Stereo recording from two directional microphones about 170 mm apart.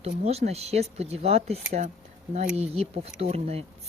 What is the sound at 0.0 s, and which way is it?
Speech, 40° right (ahead or behind).